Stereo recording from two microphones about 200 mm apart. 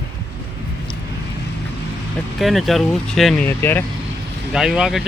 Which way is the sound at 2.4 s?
Centre (ahead or behind).